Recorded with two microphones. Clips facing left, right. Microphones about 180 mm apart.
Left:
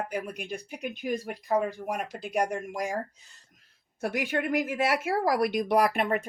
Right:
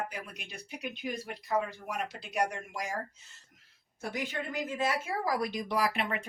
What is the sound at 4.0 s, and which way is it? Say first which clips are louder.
A woman's voice: left 7 dB; 70° left (ahead or behind).